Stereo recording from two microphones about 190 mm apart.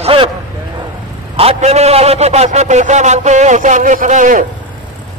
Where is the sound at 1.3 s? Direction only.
35° right (ahead or behind).